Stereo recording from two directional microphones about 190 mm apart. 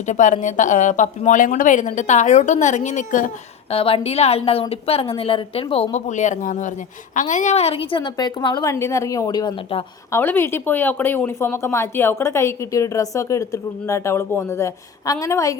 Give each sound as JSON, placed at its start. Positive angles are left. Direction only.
{"t": 0.0, "sound": "a woman's voice", "side_deg": 40}
{"t": 3.7, "sound": "a woman's voice", "side_deg": 30}
{"t": 10.1, "sound": "speech", "side_deg": 10}